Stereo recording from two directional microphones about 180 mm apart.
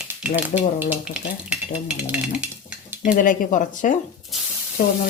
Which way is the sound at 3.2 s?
45° left (ahead or behind).